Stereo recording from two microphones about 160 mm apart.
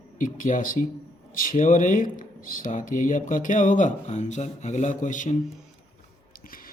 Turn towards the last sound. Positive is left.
turn(degrees=65)  # may be behind; listen again after turning